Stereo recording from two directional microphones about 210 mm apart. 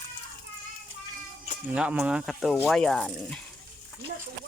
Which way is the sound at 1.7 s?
5° right (ahead or behind).